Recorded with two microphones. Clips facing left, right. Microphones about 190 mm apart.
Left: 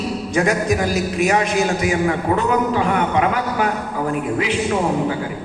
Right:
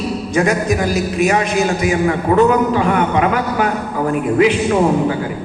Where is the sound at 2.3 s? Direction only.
60° right (ahead or behind).